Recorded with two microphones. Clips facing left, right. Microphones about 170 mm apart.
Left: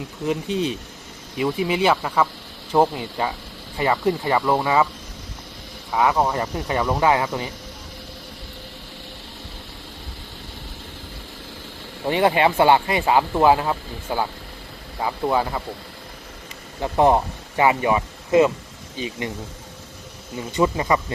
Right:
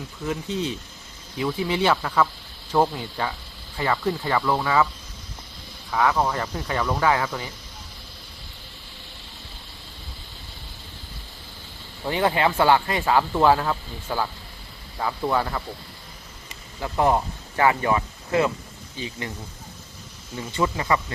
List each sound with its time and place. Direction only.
0.3 s speech: 15° left (ahead or behind)
5.9 s speech: 20° left (ahead or behind)
12.0 s speech: 20° left (ahead or behind)
16.8 s speech: 25° left (ahead or behind)
20.5 s speech: 20° left (ahead or behind)